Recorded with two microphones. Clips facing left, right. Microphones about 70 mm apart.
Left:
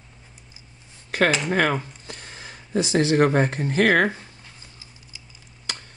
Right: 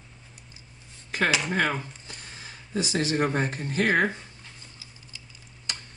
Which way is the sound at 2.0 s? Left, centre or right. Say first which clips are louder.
Left 4 dB; left.